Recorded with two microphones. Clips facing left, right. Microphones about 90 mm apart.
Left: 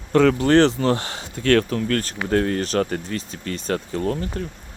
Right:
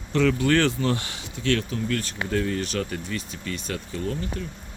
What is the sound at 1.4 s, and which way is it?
Speech, 55° left (ahead or behind).